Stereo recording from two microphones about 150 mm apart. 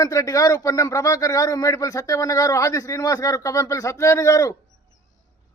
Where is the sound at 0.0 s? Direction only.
20° left (ahead or behind).